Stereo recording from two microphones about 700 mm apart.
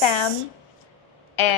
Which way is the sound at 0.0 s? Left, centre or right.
Left.